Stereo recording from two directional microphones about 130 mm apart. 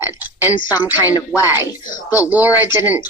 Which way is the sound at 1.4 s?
20° right (ahead or behind).